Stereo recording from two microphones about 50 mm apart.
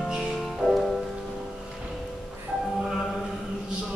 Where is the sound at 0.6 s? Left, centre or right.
Centre.